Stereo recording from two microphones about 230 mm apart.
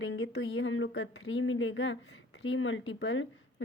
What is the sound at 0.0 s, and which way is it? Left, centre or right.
A woman's voice, left.